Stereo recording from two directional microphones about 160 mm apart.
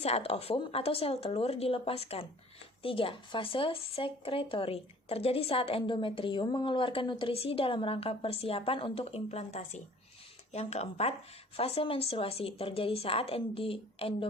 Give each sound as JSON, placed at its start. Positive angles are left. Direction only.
{"t": 0.0, "sound": "speech", "side_deg": 40}